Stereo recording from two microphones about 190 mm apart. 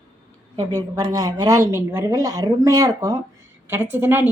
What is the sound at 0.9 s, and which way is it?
A woman's voice, 20° right (ahead or behind).